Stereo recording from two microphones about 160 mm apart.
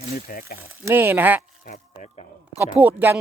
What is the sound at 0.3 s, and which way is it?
Speech, 65° left (ahead or behind).